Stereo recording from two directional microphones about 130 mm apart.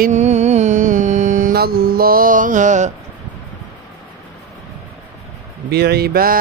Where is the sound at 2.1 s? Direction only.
90° right; by 2.9 s 70° right (ahead or behind).